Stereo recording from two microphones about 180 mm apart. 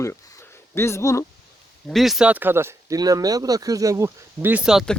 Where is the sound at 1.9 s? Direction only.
Centre (ahead or behind).